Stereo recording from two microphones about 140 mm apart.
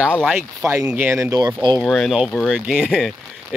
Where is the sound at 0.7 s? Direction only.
15° right (ahead or behind).